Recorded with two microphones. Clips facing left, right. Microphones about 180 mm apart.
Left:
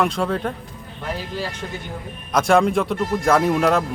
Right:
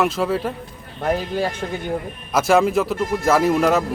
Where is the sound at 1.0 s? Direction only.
55° right (ahead or behind).